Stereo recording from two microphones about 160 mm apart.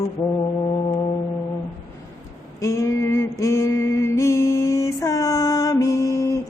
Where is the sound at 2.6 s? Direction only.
20° left (ahead or behind).